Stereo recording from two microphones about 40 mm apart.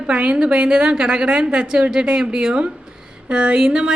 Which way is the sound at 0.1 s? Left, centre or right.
Right.